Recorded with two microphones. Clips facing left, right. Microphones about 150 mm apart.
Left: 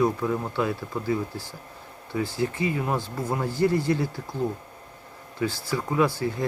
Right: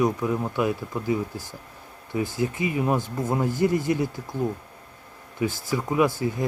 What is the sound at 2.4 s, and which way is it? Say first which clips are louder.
Speech: right 1 dB; 20° right (ahead or behind).